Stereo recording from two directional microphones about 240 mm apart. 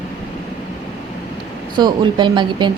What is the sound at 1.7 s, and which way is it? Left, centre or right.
Speech, centre.